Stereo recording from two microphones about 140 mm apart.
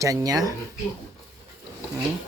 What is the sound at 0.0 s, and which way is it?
Speech, 25° right (ahead or behind).